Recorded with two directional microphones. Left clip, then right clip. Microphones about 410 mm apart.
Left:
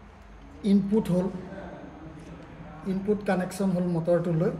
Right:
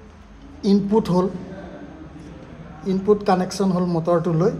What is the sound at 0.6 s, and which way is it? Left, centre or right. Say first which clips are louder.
Speech: right 7 dB; centre.